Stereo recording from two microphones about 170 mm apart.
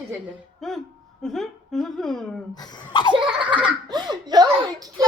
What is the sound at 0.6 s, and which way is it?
Speech, centre (ahead or behind).